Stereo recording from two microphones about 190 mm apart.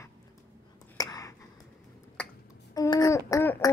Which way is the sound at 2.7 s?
20° left (ahead or behind).